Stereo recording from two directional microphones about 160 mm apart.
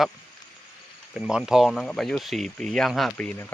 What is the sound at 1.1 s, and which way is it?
Speech, 5° right (ahead or behind).